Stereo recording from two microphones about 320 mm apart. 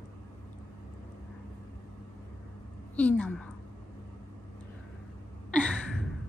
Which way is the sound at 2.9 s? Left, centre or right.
Centre.